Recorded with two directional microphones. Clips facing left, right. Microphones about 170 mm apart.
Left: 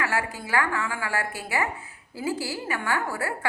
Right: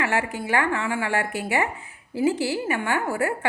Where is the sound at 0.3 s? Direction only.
25° right (ahead or behind).